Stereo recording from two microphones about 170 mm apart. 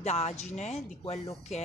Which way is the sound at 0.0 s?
40° left (ahead or behind).